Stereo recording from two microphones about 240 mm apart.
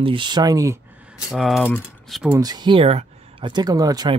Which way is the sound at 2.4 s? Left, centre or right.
Centre.